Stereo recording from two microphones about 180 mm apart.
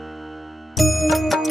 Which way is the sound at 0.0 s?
Centre (ahead or behind).